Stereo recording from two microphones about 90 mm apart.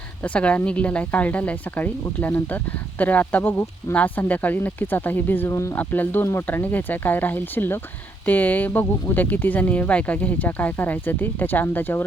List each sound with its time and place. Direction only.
0.2 s speech: 15° left (ahead or behind); by 5.7 s 30° left (ahead or behind)
5.7 s speech: 20° left (ahead or behind)